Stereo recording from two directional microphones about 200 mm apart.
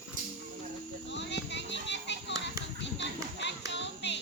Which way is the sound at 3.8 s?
60° left (ahead or behind).